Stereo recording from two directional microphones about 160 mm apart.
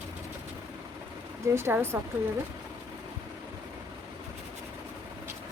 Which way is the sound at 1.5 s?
15° right (ahead or behind).